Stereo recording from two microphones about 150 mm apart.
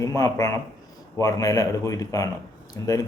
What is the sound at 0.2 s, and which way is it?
A man's voice, 25° left (ahead or behind).